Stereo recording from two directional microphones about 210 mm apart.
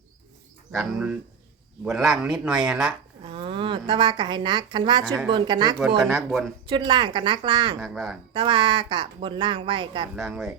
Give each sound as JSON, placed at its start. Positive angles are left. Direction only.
{"t": 0.7, "sound": "speech", "side_deg": 0}
{"t": 3.2, "sound": "a woman's voice", "side_deg": -25}
{"t": 6.1, "sound": "speech", "side_deg": 0}
{"t": 6.7, "sound": "speech", "side_deg": -20}
{"t": 7.8, "sound": "speech", "side_deg": 0}
{"t": 8.3, "sound": "speech", "side_deg": -25}
{"t": 10.2, "sound": "speech", "side_deg": 0}